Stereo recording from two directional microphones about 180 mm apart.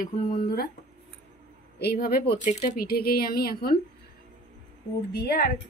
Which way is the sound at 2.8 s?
55° left (ahead or behind).